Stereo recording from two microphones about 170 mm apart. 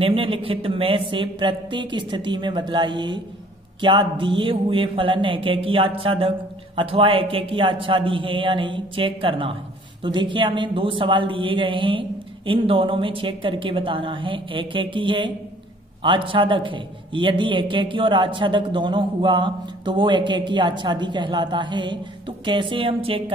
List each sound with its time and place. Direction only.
0.0 s a man's voice: 30° right (ahead or behind)